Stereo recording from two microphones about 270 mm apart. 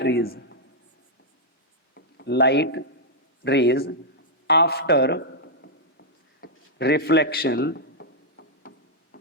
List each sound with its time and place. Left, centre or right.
0.0 s a man's voice: left
2.0 s a man's voice: left
6.4 s a sound: left